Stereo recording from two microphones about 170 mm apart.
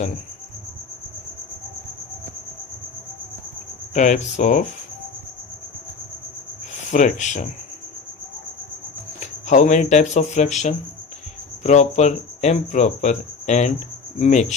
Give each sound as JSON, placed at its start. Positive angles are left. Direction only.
{"t": 3.9, "sound": "speech", "side_deg": 45}
{"t": 6.9, "sound": "speech", "side_deg": 45}
{"t": 9.2, "sound": "speech", "side_deg": 45}